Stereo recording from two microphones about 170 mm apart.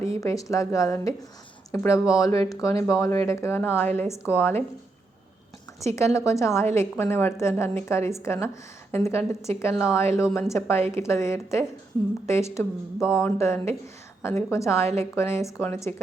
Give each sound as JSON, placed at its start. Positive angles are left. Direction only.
{"t": 0.0, "sound": "a woman's voice", "side_deg": 20}
{"t": 6.0, "sound": "a woman's voice", "side_deg": 15}